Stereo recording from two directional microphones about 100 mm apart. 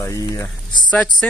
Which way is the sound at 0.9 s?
10° left (ahead or behind).